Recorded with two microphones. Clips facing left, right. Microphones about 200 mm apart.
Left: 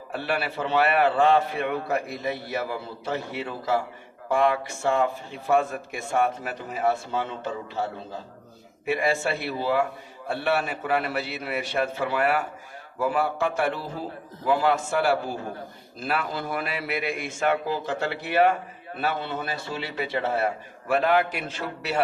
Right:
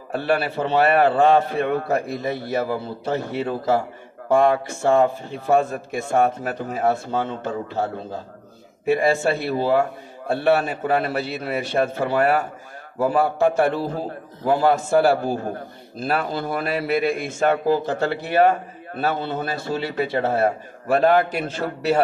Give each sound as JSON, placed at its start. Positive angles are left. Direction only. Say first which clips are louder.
{"t": 0.1, "sound": "a man's voice", "louder": "right 6 dB", "side_deg": -45}